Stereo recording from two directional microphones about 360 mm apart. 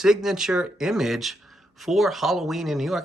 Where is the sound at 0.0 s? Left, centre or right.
Centre.